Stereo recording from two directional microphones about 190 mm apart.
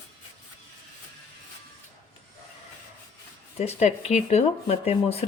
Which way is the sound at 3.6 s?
35° left (ahead or behind).